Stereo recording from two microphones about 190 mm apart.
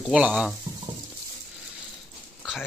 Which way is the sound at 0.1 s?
5° right (ahead or behind).